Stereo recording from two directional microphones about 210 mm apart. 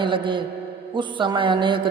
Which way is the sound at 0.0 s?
25° right (ahead or behind).